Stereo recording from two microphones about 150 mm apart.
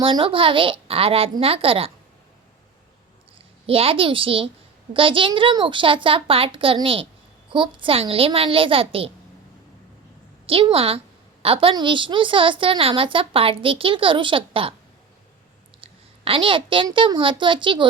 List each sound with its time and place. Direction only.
0.0 s a woman's voice: 35° right (ahead or behind)
3.7 s a woman's voice: 40° right (ahead or behind)
10.4 s a woman's voice: 40° right (ahead or behind)
15.8 s a woman's voice: 35° right (ahead or behind)